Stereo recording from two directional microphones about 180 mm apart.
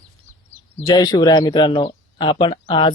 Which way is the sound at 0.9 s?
20° left (ahead or behind).